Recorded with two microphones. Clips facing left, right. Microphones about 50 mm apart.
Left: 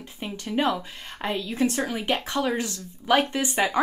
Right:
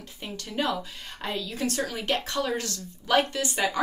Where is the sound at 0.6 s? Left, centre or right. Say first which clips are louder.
Left 3 dB; left.